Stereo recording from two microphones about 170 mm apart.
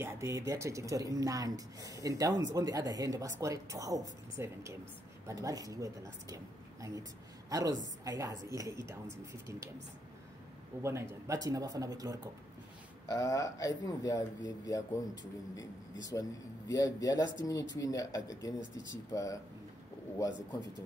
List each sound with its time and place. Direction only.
0.0 s a woman's voice: 15° right (ahead or behind)
10.8 s speech: 15° right (ahead or behind)
13.1 s speech: 20° left (ahead or behind)
16.0 s speech: 20° left (ahead or behind)